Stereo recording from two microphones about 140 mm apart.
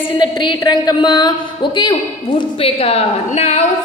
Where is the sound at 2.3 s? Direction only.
45° left (ahead or behind).